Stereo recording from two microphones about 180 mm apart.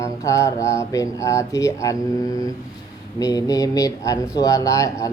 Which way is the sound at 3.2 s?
20° left (ahead or behind).